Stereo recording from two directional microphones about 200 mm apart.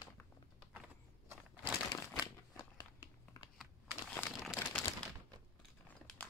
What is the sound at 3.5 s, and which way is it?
Crumpling, 5° left (ahead or behind).